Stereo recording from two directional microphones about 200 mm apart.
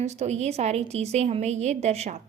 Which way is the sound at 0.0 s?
35° right (ahead or behind).